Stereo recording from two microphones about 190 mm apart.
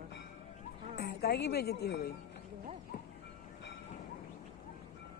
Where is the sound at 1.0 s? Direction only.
55° left (ahead or behind).